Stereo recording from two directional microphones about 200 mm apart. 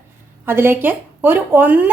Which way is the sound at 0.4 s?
10° right (ahead or behind).